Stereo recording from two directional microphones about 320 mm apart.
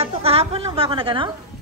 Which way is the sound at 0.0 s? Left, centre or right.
Centre.